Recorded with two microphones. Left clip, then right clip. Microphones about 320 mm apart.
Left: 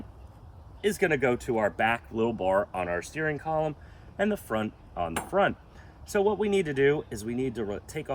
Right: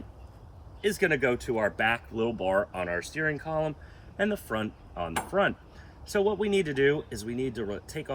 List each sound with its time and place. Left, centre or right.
0.8 s speech: left